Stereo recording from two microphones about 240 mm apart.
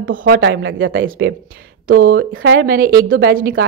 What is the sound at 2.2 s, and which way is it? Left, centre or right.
Speech, right.